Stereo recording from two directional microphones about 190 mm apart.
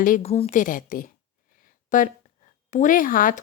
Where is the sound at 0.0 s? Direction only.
45° left (ahead or behind).